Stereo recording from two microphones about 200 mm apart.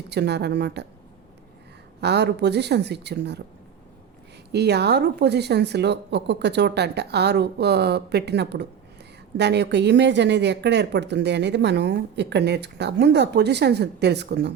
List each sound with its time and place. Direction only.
0.1 s a woman's voice: 55° right (ahead or behind)
2.0 s a woman's voice: 55° right (ahead or behind)
4.5 s a woman's voice: 55° right (ahead or behind)